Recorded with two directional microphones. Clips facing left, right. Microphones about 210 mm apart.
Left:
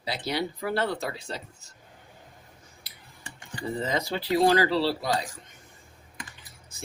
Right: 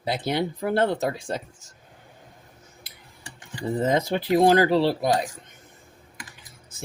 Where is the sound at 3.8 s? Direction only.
50° right (ahead or behind).